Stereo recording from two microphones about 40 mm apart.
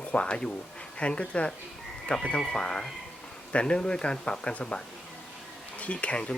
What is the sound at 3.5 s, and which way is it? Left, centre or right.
Speech, left.